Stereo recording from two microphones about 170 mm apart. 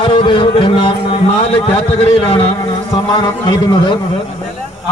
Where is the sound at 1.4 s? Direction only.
35° left (ahead or behind).